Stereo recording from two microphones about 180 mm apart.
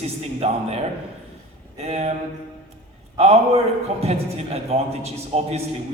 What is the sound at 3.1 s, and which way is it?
A man's voice, 35° right (ahead or behind).